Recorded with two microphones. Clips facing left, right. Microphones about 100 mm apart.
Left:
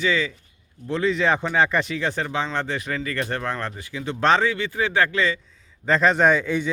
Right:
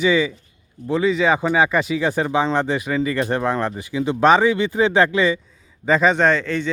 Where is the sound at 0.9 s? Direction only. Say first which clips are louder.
Right 4 dB; 5° right (ahead or behind).